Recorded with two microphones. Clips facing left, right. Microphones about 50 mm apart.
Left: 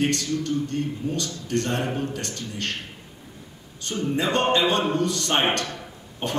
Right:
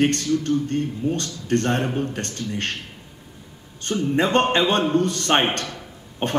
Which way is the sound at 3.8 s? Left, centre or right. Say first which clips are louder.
Right 4 dB; right.